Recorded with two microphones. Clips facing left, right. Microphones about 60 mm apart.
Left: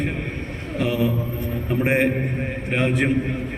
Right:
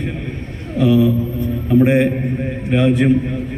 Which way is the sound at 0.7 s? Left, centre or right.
Left.